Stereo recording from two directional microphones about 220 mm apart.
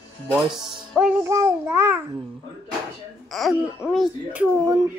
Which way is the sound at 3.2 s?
Centre (ahead or behind).